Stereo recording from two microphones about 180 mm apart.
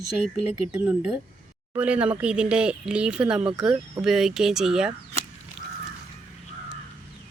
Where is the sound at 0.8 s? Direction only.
10° right (ahead or behind).